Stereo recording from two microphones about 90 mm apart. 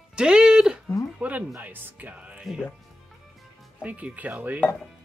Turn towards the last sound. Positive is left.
turn(degrees=-15)  # may be behind; listen again after turning